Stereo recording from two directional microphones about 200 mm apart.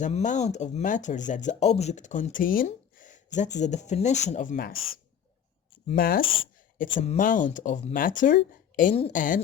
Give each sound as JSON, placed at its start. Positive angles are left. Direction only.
{"t": 0.0, "sound": "speech", "side_deg": 35}
{"t": 6.0, "sound": "speech", "side_deg": 45}
{"t": 6.8, "sound": "speech", "side_deg": 30}